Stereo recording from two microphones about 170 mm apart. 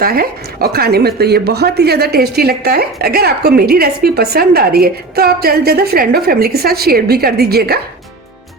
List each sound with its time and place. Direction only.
0.0 s a woman's voice: 60° right (ahead or behind)